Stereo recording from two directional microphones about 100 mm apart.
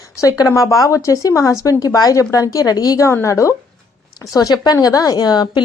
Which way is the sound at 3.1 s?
30° left (ahead or behind).